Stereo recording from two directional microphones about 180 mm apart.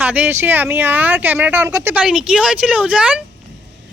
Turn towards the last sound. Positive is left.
turn(degrees=-5)  # may be behind; listen again after turning